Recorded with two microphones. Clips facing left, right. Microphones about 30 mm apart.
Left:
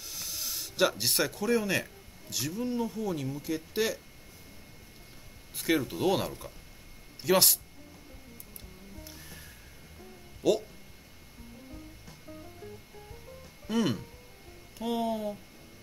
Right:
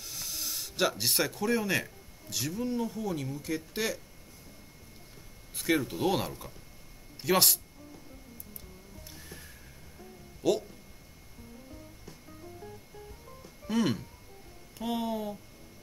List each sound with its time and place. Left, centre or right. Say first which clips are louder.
0.0 s speech: even; centre
5.6 s speech: even; centre
9.0 s music: right 2 dB; centre
10.4 s speech: left 1 dB; centre
13.7 s speech: even; centre